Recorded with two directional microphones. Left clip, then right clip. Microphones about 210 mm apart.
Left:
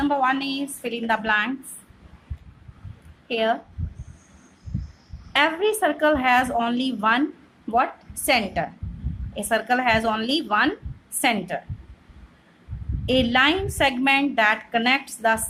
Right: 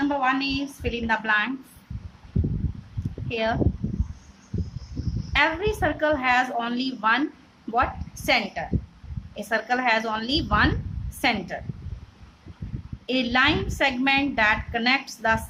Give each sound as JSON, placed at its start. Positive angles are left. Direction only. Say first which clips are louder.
{"t": 0.0, "sound": "a woman's voice", "louder": "left 2 dB", "side_deg": 15}
{"t": 3.2, "sound": "a woman's voice", "louder": "left 3 dB", "side_deg": 15}
{"t": 5.3, "sound": "a woman's voice", "louder": "left 2 dB", "side_deg": 15}
{"t": 13.1, "sound": "a woman's voice", "louder": "left 2 dB", "side_deg": 15}